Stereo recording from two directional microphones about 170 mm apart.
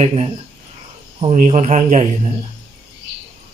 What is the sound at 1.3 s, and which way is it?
A man's voice, 45° right (ahead or behind).